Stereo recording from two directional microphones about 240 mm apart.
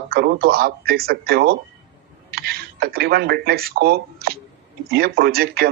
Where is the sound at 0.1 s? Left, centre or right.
Right.